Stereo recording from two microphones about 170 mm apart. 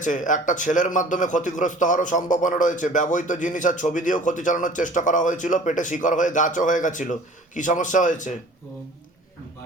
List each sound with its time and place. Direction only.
0.0 s a man's voice: 50° left (ahead or behind)